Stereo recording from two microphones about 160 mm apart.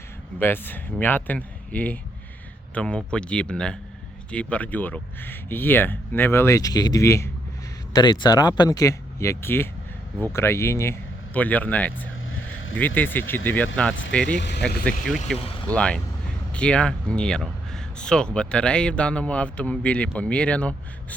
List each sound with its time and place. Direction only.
0.3 s speech: 10° left (ahead or behind)
14.3 s speech: 90° left
15.3 s speech: 5° left (ahead or behind)